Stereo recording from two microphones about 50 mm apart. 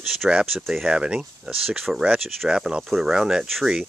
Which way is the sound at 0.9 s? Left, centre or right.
Centre.